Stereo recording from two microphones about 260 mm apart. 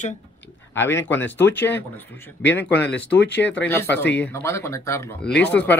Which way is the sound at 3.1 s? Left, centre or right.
Left.